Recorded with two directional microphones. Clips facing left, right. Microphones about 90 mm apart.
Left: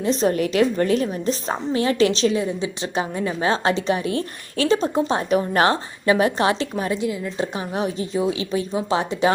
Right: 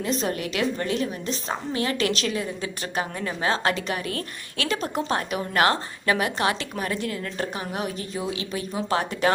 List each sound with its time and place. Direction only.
0.0 s a woman's voice: 35° left (ahead or behind); by 7.4 s 15° left (ahead or behind)
7.5 s a woman's voice: 30° left (ahead or behind)